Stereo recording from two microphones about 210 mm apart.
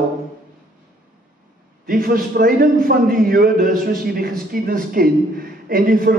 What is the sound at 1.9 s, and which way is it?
A man's voice, 45° right (ahead or behind).